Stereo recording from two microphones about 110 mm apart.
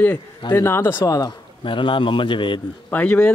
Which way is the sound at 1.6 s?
50° left (ahead or behind).